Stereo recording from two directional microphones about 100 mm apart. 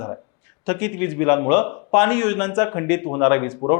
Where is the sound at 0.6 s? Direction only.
15° left (ahead or behind).